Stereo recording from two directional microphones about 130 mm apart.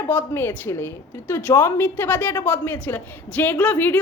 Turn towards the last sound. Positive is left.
turn(degrees=15)  # may be behind; listen again after turning